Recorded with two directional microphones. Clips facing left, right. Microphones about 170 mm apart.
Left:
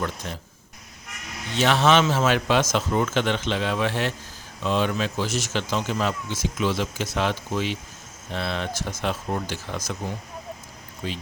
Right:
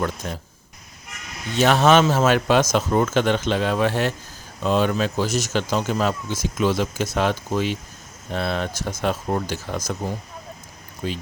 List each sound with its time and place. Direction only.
0.2 s speech: 45° right (ahead or behind)
1.5 s speech: 45° right (ahead or behind)
11.0 s speech: 45° right (ahead or behind)